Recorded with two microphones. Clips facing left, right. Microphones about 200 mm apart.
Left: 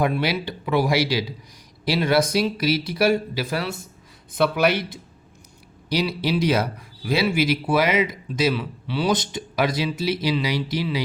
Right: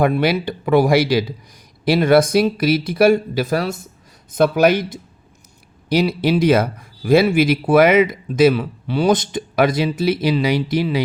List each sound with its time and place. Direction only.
0.0 s speech: 50° right (ahead or behind)
5.9 s speech: 50° right (ahead or behind)